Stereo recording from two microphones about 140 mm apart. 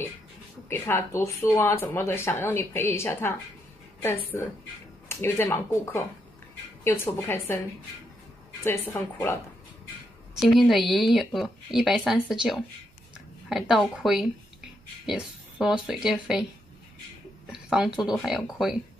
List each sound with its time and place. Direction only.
0.7 s speech: 15° left (ahead or behind)
10.4 s speech: centre (ahead or behind)
17.5 s speech: 5° right (ahead or behind)